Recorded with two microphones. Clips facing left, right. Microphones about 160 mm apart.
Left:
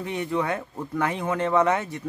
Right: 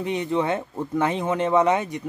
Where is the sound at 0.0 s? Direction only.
20° right (ahead or behind).